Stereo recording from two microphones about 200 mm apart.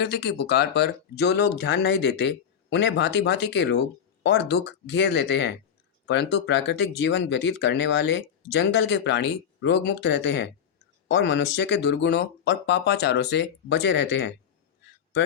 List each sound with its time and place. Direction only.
0.0 s speech: 55° left (ahead or behind)